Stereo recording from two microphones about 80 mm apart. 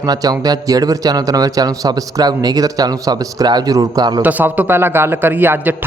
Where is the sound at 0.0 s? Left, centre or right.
Right.